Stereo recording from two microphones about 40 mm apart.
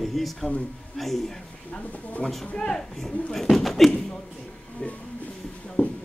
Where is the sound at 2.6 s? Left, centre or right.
Centre.